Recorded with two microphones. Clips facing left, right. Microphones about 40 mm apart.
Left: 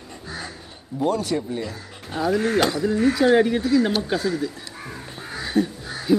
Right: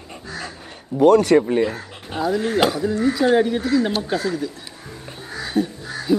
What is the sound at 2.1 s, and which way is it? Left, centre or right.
Speech, centre.